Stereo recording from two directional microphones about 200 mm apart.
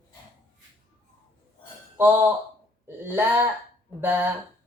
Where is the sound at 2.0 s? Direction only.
10° right (ahead or behind).